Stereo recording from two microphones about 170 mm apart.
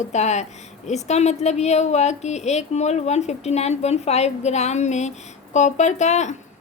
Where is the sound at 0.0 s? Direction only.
45° left (ahead or behind).